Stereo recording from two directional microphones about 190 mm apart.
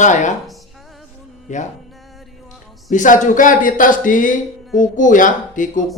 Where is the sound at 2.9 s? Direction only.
40° left (ahead or behind).